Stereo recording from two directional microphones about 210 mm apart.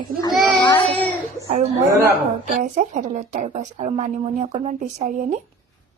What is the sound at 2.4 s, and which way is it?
A woman's voice, 35° right (ahead or behind).